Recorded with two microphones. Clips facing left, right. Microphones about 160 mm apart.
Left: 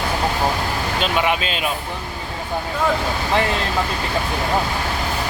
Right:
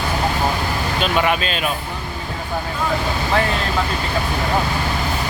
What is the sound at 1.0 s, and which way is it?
Speech, 15° left (ahead or behind).